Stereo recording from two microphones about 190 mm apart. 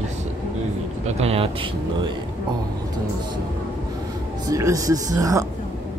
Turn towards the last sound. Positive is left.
turn(degrees=-20)  # may be behind; listen again after turning